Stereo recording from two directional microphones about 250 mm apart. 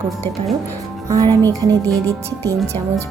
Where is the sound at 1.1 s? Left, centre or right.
Centre.